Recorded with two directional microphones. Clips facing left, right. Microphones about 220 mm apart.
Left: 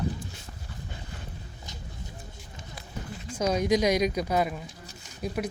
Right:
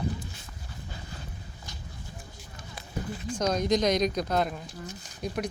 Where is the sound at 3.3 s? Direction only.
10° left (ahead or behind).